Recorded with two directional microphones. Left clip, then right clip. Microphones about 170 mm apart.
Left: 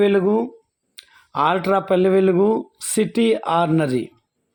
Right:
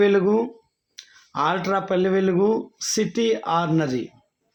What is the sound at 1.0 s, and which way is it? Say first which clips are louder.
Speech: left 4 dB; 30° left (ahead or behind).